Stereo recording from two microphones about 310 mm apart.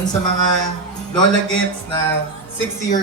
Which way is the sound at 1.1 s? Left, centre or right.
Centre.